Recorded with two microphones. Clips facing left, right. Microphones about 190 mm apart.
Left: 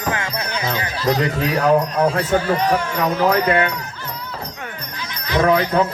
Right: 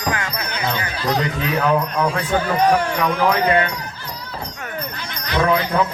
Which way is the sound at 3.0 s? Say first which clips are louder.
Left 1 dB; 25° left (ahead or behind).